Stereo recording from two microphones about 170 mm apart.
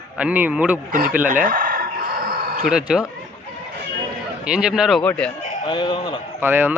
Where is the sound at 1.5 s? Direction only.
55° right (ahead or behind).